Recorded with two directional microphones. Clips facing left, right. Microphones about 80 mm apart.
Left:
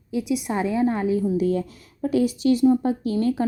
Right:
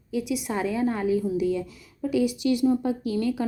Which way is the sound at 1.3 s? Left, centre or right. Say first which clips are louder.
Left 3 dB; left.